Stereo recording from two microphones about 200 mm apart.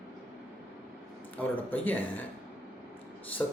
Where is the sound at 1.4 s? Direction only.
10° left (ahead or behind).